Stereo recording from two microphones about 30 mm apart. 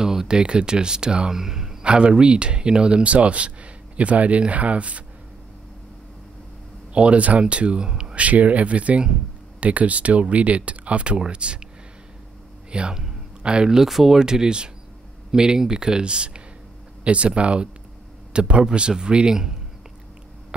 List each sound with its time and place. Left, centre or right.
0.0 s a sound: centre
0.4 s speech: right
1.3 s a man's voice: centre
1.8 s speech: right
3.0 s speech: right
6.9 s speech: right
8.1 s speech: right
11.2 s speech: right
12.9 s a sound: centre
13.4 s a sound: right
13.8 s speech: centre
14.2 s speech: right